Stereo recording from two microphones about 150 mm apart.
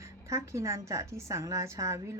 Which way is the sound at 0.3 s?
20° right (ahead or behind).